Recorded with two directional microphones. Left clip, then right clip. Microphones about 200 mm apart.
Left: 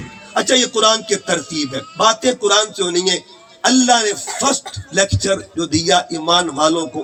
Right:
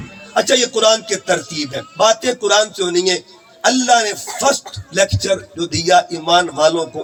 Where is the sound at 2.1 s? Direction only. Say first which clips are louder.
Left 1 dB; 20° right (ahead or behind).